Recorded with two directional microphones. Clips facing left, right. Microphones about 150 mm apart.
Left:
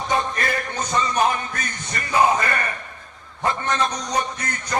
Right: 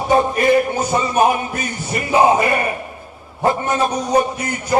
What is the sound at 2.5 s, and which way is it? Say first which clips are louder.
A man's voice: right 7 dB; 15° right (ahead or behind).